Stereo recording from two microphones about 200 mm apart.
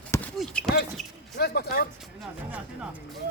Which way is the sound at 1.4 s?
50° left (ahead or behind).